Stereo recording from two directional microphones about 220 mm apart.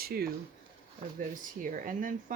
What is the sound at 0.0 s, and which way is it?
Speech, 45° right (ahead or behind).